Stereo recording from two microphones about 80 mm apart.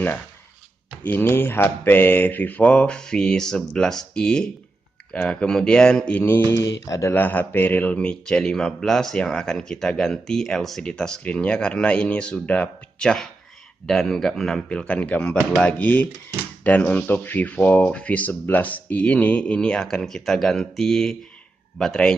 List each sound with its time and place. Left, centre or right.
1.0 s speech: left; by 6.1 s centre
6.1 s speech: left
6.5 s speech: left
7.2 s speech: left; by 22.1 s centre